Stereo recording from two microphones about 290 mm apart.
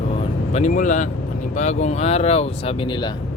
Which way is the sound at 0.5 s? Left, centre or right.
Left.